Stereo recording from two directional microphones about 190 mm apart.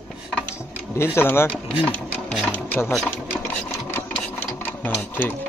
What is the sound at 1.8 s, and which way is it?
Sewing machine, 10° left (ahead or behind).